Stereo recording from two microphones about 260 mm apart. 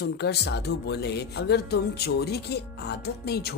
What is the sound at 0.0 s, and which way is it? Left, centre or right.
Speech, left.